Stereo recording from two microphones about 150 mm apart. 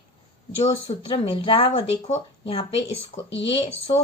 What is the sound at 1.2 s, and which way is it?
Speech, 35° left (ahead or behind).